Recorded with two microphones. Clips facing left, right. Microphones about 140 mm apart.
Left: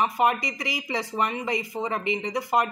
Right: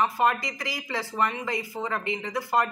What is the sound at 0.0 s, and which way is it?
Speech, 20° left (ahead or behind).